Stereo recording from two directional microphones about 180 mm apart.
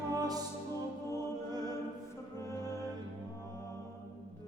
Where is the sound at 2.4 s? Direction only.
15° left (ahead or behind).